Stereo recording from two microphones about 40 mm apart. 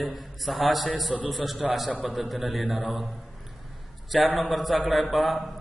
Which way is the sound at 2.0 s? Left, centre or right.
Centre.